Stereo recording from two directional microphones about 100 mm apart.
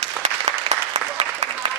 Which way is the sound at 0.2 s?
90° right.